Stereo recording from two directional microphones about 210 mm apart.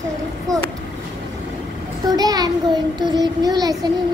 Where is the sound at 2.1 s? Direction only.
15° right (ahead or behind).